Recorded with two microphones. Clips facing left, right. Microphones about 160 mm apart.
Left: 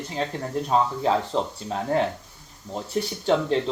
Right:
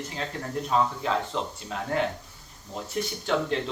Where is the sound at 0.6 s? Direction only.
35° left (ahead or behind).